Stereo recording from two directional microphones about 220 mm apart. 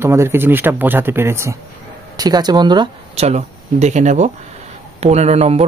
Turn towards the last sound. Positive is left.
turn(degrees=-30)  # may be behind; listen again after turning